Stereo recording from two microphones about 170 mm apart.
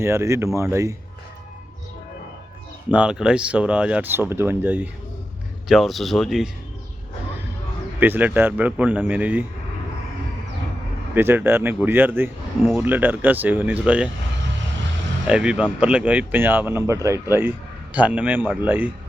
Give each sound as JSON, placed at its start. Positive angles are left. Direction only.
{"t": 0.0, "sound": "speech", "side_deg": -15}
{"t": 2.9, "sound": "speech", "side_deg": -5}
{"t": 5.6, "sound": "a man's voice", "side_deg": 0}
{"t": 7.9, "sound": "speech", "side_deg": -10}
{"t": 11.1, "sound": "speech", "side_deg": -10}
{"t": 15.3, "sound": "a man's voice", "side_deg": -5}